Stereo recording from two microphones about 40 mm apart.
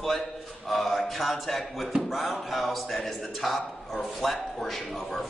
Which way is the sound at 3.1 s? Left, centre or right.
Centre.